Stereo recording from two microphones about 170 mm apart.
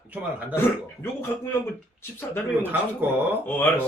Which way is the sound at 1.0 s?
15° left (ahead or behind).